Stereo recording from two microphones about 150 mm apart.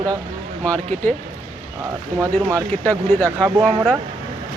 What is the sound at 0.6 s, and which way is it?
Speech, 10° left (ahead or behind).